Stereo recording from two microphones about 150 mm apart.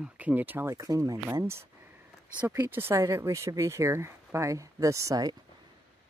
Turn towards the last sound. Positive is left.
turn(degrees=-25)  # may be behind; listen again after turning